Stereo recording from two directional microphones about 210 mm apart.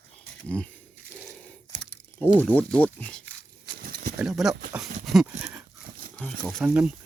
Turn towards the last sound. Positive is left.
turn(degrees=-5)  # may be behind; listen again after turning